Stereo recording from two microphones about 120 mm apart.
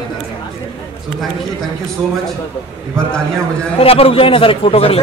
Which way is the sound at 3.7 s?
55° left (ahead or behind).